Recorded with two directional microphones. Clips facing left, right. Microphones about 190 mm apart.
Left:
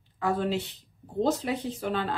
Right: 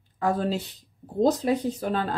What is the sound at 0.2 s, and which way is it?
Speech, 40° right (ahead or behind).